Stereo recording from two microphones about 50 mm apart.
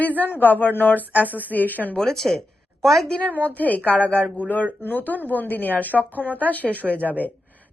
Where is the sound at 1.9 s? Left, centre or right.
Centre.